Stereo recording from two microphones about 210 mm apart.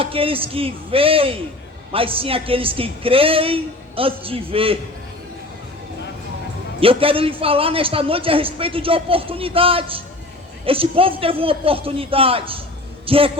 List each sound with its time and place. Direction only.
0.0 s a man's voice: 25° right (ahead or behind)
6.7 s a man's voice: 25° right (ahead or behind)